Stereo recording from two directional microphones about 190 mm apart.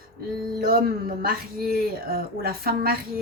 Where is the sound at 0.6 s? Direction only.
50° right (ahead or behind).